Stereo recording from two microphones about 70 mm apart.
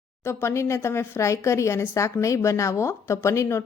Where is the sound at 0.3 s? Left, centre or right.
Left.